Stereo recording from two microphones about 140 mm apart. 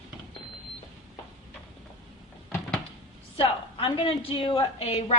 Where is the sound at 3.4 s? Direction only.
40° left (ahead or behind).